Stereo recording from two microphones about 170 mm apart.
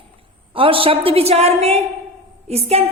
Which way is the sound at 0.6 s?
30° right (ahead or behind).